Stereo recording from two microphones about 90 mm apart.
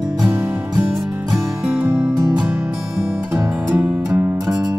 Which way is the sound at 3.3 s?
30° right (ahead or behind).